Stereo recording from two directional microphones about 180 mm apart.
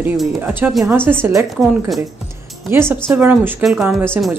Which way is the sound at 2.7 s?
15° right (ahead or behind).